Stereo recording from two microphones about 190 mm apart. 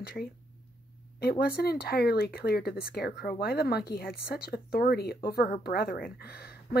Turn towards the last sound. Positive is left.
turn(degrees=55)  # may be behind; listen again after turning